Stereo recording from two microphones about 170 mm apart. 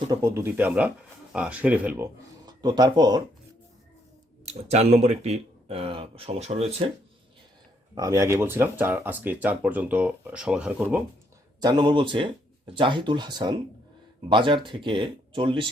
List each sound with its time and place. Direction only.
0.2 s speech: 10° right (ahead or behind)
2.5 s speech: 25° right (ahead or behind)
4.4 s speech: 40° right (ahead or behind)
7.9 s speech: 20° right (ahead or behind)
11.6 s speech: 25° right (ahead or behind)